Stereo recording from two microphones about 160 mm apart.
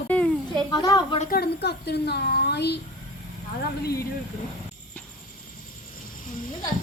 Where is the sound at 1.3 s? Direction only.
85° left.